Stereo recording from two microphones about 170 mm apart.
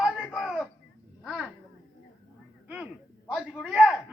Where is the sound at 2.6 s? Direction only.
5° right (ahead or behind).